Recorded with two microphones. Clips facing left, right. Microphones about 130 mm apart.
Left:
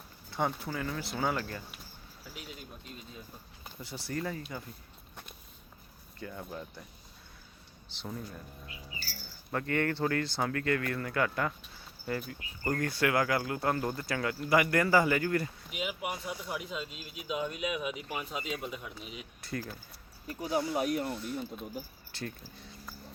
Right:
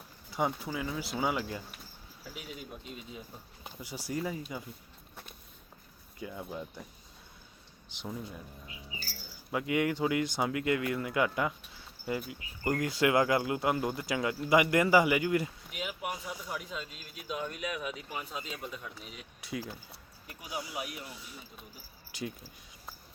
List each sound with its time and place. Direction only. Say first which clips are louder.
0.3 s speech: right 1 dB; 10° right (ahead or behind)
6.1 s speech: right 1 dB; 10° right (ahead or behind)
9.5 s speech: right 1 dB; 10° right (ahead or behind)
15.7 s speech: left 3 dB; 10° left (ahead or behind)
19.5 s speech: even; 5° right (ahead or behind)
20.7 s speech: left 9 dB; 40° left (ahead or behind)
21.1 s speech: left 12 dB; 5° right (ahead or behind)